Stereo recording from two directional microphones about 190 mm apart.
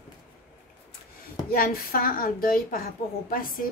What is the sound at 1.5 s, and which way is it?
A woman's voice, 50° left (ahead or behind).